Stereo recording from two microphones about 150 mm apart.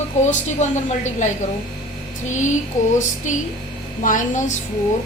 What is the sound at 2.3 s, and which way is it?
Speech, 55° left (ahead or behind).